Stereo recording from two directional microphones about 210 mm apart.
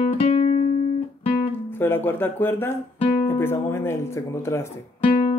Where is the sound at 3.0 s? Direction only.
30° left (ahead or behind).